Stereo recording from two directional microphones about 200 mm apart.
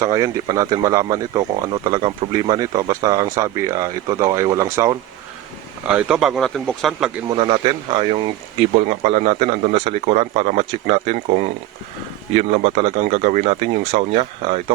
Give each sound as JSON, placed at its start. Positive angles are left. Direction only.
{"t": 0.0, "sound": "a man's voice", "side_deg": -15}
{"t": 5.9, "sound": "speech", "side_deg": -5}
{"t": 7.3, "sound": "a man's voice", "side_deg": -25}